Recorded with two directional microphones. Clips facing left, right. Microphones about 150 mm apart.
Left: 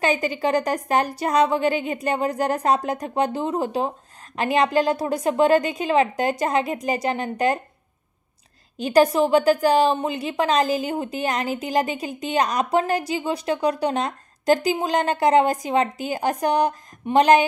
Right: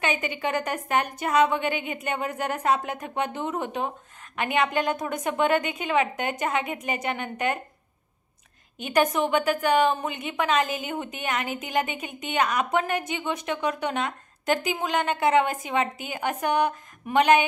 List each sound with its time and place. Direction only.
0.0 s a woman's voice: 35° left (ahead or behind)
8.7 s a woman's voice: 35° left (ahead or behind)